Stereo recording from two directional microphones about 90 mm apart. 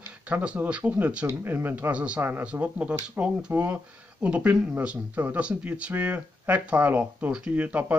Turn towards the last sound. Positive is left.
turn(degrees=-15)  # may be behind; listen again after turning